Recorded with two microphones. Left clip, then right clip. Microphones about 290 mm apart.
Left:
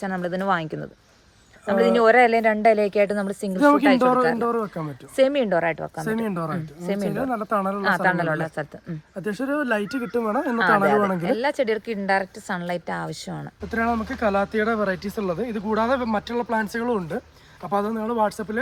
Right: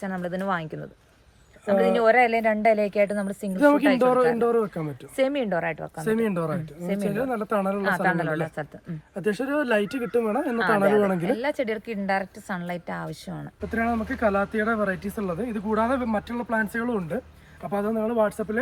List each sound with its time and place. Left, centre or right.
0.0 s a woman's voice: left
4.4 s speech: centre
5.1 s a woman's voice: left
6.2 s speech: centre
7.8 s a woman's voice: left
9.2 s speech: centre
11.2 s a woman's voice: left
13.7 s speech: centre